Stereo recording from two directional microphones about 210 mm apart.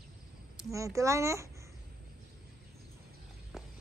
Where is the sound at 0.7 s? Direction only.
15° right (ahead or behind).